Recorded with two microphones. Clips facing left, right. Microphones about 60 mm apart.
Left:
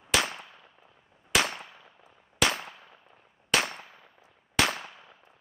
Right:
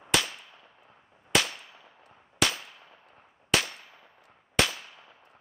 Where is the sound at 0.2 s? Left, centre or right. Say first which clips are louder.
Left 4 dB; left.